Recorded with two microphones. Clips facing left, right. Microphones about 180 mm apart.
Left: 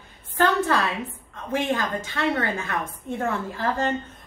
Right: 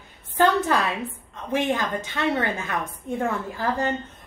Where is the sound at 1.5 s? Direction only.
15° right (ahead or behind).